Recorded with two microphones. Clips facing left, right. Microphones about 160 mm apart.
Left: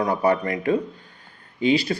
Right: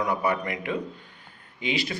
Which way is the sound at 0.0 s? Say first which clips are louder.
Left 5 dB; 35° left (ahead or behind).